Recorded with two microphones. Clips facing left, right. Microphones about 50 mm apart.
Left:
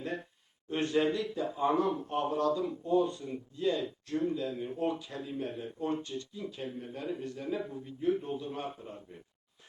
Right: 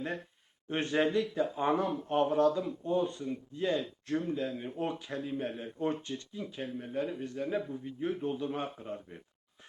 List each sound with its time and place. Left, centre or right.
0.9 s a man's voice: right
3.6 s a man's voice: right
6.3 s a man's voice: right